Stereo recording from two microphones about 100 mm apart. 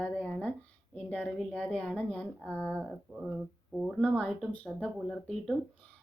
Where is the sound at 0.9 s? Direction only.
15° left (ahead or behind).